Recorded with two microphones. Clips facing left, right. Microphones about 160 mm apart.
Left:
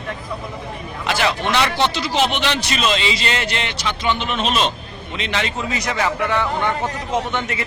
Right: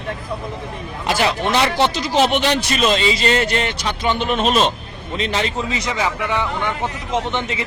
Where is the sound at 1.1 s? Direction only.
40° right (ahead or behind).